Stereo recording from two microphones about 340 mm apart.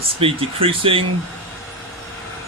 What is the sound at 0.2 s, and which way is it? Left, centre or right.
Speech, centre.